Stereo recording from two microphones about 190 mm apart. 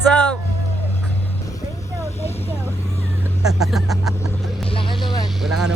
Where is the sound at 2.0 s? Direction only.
35° left (ahead or behind).